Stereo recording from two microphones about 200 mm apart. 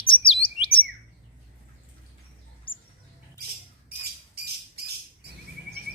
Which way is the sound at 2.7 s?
25° left (ahead or behind).